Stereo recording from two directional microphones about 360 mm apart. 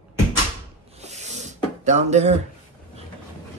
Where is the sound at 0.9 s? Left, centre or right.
Centre.